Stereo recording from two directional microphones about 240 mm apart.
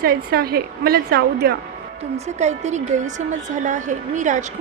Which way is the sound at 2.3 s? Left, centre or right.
Right.